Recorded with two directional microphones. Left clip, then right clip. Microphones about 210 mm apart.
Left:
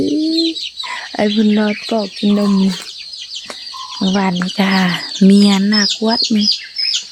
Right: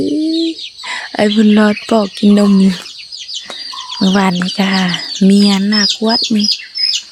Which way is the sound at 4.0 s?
15° right (ahead or behind).